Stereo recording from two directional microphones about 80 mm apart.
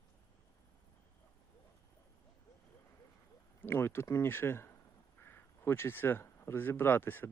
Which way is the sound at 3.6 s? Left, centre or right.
Left.